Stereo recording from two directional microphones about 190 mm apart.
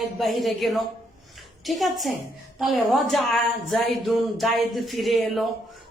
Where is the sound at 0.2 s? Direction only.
Centre (ahead or behind).